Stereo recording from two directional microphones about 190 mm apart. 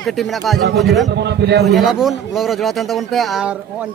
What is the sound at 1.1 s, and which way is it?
Speech, 65° right (ahead or behind).